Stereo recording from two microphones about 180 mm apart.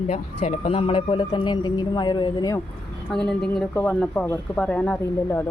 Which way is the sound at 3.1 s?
5° left (ahead or behind).